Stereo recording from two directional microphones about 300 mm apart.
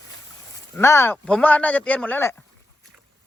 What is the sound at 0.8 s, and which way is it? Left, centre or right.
Speech, centre.